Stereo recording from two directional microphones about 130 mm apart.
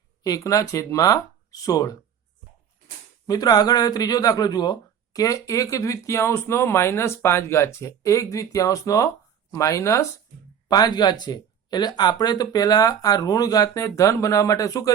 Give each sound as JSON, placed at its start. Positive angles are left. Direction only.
{"t": 0.2, "sound": "speech", "side_deg": 25}
{"t": 3.2, "sound": "speech", "side_deg": 30}